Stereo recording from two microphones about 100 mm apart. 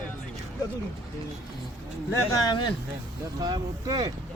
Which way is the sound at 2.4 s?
50° left (ahead or behind).